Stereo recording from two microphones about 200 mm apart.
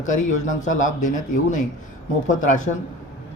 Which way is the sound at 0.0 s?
35° left (ahead or behind).